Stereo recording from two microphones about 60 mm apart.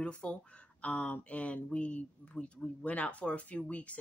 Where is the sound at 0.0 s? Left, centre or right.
Centre.